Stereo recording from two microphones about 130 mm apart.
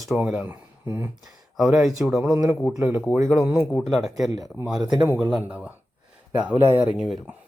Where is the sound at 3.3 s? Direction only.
Centre (ahead or behind).